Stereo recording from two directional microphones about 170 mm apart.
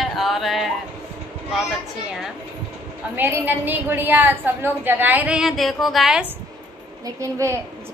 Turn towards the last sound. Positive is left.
turn(degrees=-20)  # may be behind; listen again after turning